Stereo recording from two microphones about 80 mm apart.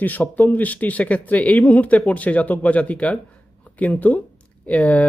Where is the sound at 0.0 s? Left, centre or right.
Left.